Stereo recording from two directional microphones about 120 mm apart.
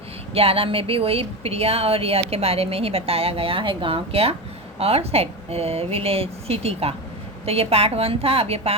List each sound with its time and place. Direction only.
0.3 s a woman's voice: 55° right (ahead or behind)